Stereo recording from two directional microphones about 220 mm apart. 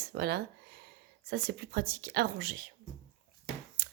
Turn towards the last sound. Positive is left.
turn(degrees=-45)  # may be behind; listen again after turning